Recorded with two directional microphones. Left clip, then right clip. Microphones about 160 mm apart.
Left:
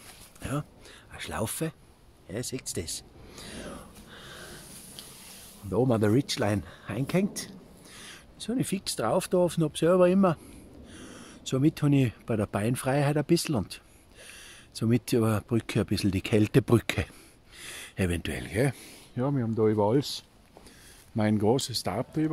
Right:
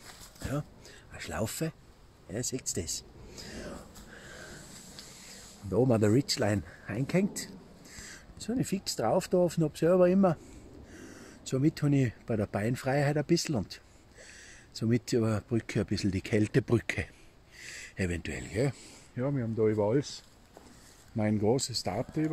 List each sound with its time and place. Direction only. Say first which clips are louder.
0.5 s a sound: left 2 dB; 5° left (ahead or behind)
5.7 s speech: left 1 dB; 5° right (ahead or behind); by 20.0 s 30° left (ahead or behind)
21.2 s speech: left 3 dB; 25° left (ahead or behind)